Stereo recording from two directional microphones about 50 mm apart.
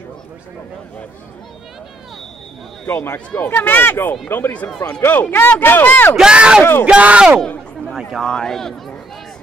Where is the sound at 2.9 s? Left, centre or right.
Left.